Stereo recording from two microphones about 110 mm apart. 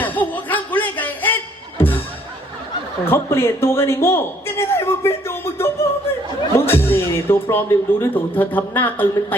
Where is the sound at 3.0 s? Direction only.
25° left (ahead or behind).